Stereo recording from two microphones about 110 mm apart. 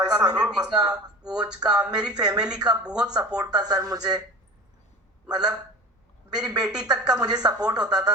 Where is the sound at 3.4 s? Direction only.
35° right (ahead or behind).